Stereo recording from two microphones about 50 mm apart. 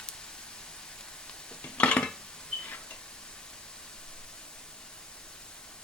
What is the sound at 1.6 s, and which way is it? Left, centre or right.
Dishes, left.